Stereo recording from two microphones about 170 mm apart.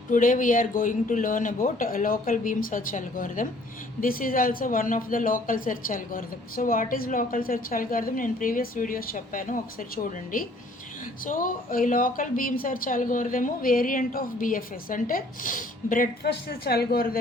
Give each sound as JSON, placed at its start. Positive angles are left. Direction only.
{"t": 0.1, "sound": "speech", "side_deg": 50}